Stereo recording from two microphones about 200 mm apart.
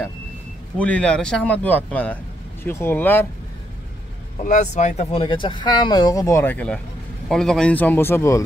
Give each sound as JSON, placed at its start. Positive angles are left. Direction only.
{"t": 0.7, "sound": "speech", "side_deg": 5}
{"t": 4.4, "sound": "speech", "side_deg": 35}